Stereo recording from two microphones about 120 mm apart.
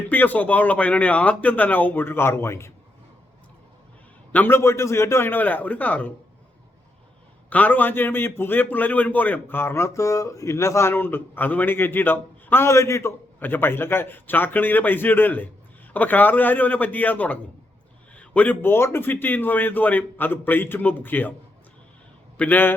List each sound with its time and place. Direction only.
0.1 s a man's voice: 15° left (ahead or behind)
4.3 s a man's voice: 15° left (ahead or behind)
7.5 s a man's voice: 15° left (ahead or behind)
22.4 s a man's voice: 15° left (ahead or behind)